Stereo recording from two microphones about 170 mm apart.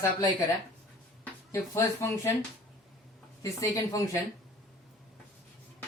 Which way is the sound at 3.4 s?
20° left (ahead or behind).